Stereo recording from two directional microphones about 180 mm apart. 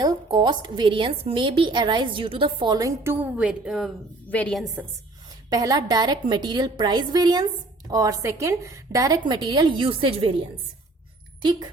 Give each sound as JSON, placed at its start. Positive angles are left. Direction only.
{"t": 0.0, "sound": "a woman's voice", "side_deg": -25}
{"t": 5.5, "sound": "a woman's voice", "side_deg": -20}